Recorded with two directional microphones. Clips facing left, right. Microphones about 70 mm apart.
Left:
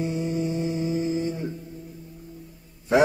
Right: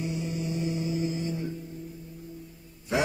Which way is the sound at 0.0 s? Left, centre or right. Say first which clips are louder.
Left 6 dB; left.